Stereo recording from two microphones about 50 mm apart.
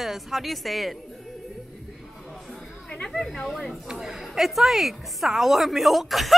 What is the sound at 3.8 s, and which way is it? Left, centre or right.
A woman's voice, centre.